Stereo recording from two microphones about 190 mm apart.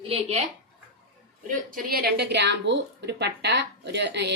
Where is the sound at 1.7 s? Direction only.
50° right (ahead or behind).